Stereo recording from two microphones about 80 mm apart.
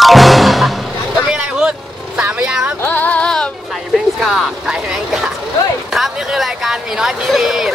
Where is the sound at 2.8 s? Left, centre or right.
Left.